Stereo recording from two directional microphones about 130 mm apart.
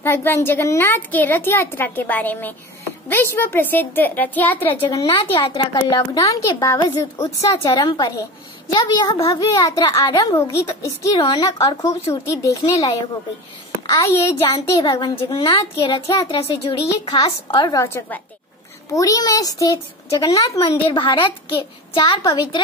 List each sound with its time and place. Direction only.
0.0 s a woman's voice: 20° left (ahead or behind)
5.0 s a child's voice: 45° left (ahead or behind); by 12.6 s 25° left (ahead or behind)
13.8 s a child's voice: 30° left (ahead or behind)
15.3 s speech: 40° left (ahead or behind)
17.7 s a woman's voice: 20° left (ahead or behind)
20.5 s speech: 45° left (ahead or behind)